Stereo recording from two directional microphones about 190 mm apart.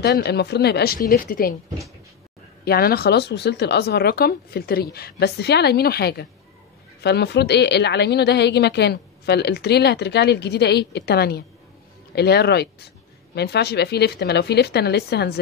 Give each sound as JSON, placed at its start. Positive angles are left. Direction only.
{"t": 0.0, "sound": "a woman's voice", "side_deg": 60}
{"t": 2.6, "sound": "a woman's voice", "side_deg": 55}